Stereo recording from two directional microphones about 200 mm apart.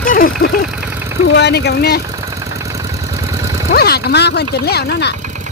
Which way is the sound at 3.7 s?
50° left (ahead or behind).